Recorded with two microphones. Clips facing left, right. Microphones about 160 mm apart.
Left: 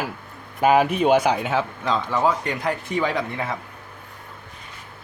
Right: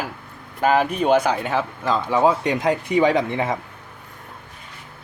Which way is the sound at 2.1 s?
20° right (ahead or behind).